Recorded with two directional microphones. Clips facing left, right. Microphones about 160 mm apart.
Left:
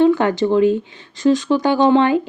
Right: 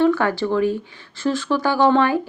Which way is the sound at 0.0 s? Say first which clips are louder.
Left 4 dB; 20° left (ahead or behind).